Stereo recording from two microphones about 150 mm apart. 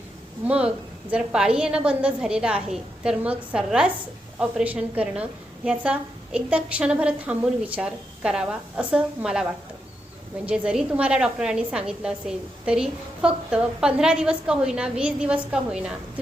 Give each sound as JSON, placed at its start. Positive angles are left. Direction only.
{"t": 0.4, "sound": "a woman's voice", "side_deg": -5}